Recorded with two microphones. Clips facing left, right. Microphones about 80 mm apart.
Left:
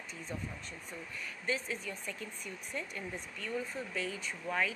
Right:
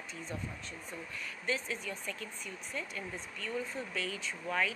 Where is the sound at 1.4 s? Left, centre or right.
Left.